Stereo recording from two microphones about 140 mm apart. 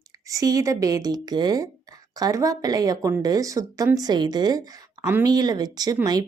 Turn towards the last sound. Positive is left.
turn(degrees=-25)  # may be behind; listen again after turning